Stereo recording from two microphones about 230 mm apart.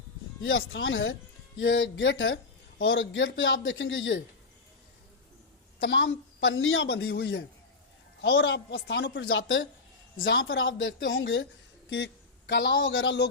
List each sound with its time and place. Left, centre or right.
0.4 s speech: left
5.8 s a woman's voice: left